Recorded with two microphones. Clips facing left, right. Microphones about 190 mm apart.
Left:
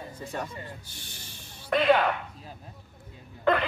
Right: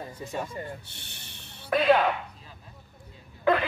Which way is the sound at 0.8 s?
65° right (ahead or behind).